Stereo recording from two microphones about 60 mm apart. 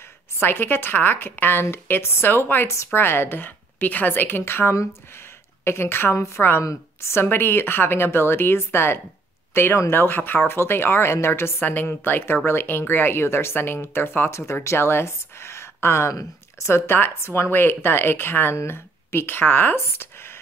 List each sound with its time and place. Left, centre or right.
0.4 s speech: left
6.6 s speech: left
11.6 s speech: left
14.4 s speech: left